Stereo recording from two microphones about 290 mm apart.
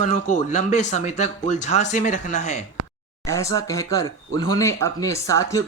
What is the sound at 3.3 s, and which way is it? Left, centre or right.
Speech, centre.